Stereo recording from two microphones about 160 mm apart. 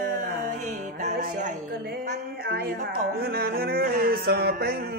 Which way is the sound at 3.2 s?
80° right.